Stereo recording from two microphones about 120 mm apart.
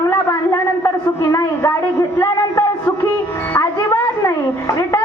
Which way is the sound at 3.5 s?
20° left (ahead or behind).